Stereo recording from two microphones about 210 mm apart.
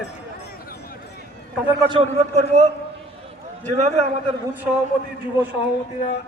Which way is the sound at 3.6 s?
30° right (ahead or behind).